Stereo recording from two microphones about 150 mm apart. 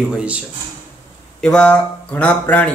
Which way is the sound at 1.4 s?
5° left (ahead or behind).